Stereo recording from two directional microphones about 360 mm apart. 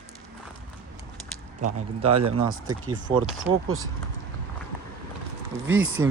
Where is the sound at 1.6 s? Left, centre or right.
Right.